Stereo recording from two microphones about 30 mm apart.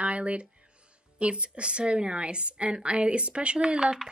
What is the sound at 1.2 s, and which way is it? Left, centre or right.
A woman's voice, right.